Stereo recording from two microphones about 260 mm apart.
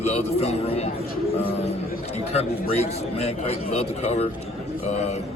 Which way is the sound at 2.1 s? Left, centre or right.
Left.